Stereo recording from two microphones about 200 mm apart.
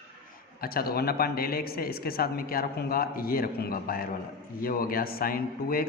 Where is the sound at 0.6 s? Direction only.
50° left (ahead or behind).